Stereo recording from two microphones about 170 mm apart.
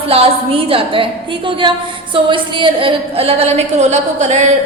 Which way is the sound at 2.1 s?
30° right (ahead or behind).